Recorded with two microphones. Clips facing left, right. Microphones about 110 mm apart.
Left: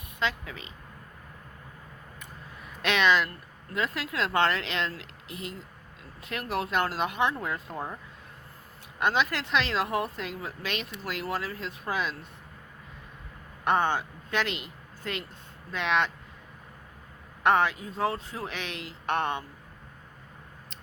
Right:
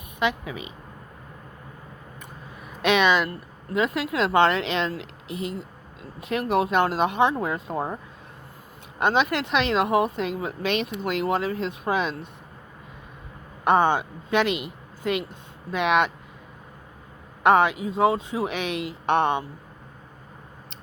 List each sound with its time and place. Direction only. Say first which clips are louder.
0.2 s speech: right 6 dB; 15° right (ahead or behind)
2.8 s speech: right 4 dB; 15° right (ahead or behind)
9.0 s speech: right 5 dB; 20° right (ahead or behind)
13.7 s speech: right 6 dB; 20° right (ahead or behind)
17.4 s speech: right 5 dB; 15° right (ahead or behind)